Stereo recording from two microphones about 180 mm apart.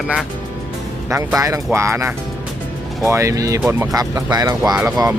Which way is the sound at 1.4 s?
15° right (ahead or behind).